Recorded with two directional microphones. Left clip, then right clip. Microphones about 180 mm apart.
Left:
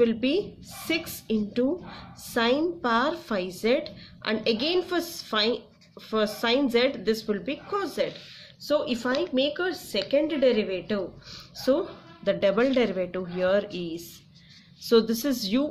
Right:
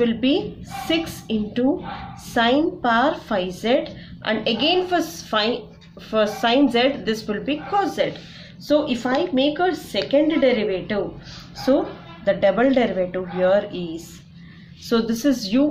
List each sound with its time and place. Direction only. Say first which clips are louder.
0.0 s a woman's voice: right 3 dB; 40° left (ahead or behind)